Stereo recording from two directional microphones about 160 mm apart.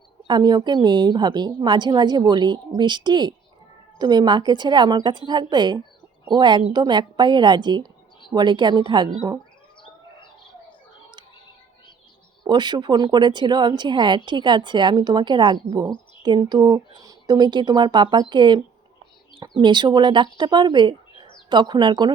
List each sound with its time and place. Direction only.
0.3 s speech: 25° right (ahead or behind)
12.5 s speech: 30° right (ahead or behind)